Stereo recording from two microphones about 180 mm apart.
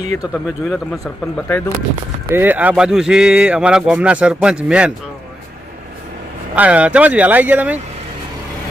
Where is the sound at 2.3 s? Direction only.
10° right (ahead or behind).